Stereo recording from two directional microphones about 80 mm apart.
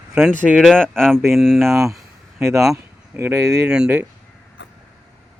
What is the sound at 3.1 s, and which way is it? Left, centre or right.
Speech, right.